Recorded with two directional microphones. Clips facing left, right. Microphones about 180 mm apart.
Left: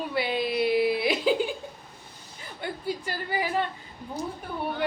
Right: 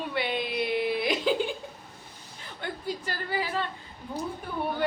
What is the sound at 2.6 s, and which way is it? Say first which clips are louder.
A woman's voice: left 2 dB; 10° left (ahead or behind).